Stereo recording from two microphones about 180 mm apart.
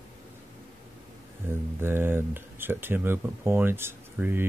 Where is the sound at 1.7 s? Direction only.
10° right (ahead or behind).